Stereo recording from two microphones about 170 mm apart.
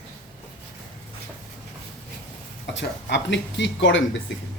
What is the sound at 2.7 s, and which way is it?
Speech, 90° left.